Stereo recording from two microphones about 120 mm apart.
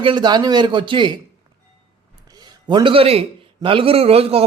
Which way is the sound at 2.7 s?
40° right (ahead or behind).